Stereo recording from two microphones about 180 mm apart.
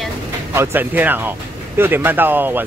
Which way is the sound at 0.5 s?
10° right (ahead or behind).